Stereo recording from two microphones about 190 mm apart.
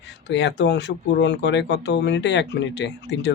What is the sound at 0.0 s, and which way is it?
Speech, 70° left (ahead or behind).